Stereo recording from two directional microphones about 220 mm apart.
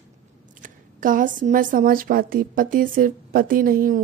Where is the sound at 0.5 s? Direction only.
35° right (ahead or behind).